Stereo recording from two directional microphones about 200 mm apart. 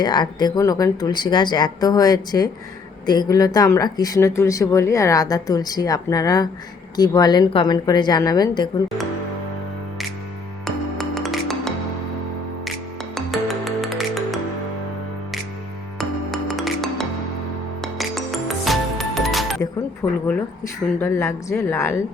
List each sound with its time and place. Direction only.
0.0 s speech: 20° left (ahead or behind)
10.9 s music: centre (ahead or behind)
13.1 s music: centre (ahead or behind)
16.0 s music: centre (ahead or behind)
20.0 s speech: 10° left (ahead or behind)